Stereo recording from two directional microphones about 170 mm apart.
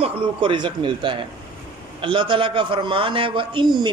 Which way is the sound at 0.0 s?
30° right (ahead or behind).